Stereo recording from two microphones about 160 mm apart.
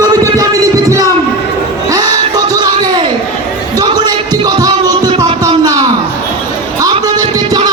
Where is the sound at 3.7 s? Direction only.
25° right (ahead or behind).